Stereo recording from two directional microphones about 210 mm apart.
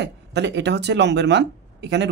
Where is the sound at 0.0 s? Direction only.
55° right (ahead or behind).